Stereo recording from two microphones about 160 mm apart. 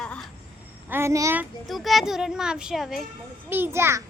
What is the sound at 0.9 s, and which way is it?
Speech, 15° right (ahead or behind).